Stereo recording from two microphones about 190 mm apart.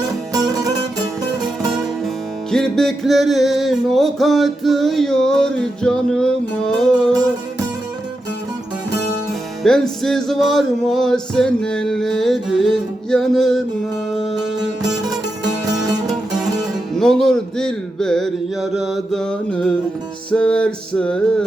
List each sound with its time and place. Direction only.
0.3 s music: 20° right (ahead or behind)
2.5 s music: 5° left (ahead or behind)
9.6 s music: 5° left (ahead or behind)
14.8 s music: 20° right (ahead or behind)
16.0 s speech: centre (ahead or behind)
20.3 s music: 5° left (ahead or behind)